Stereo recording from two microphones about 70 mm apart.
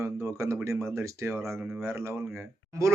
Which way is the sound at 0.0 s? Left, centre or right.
Right.